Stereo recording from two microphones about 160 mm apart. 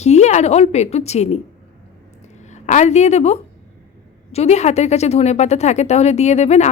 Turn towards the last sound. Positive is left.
turn(degrees=45)  # may be behind; listen again after turning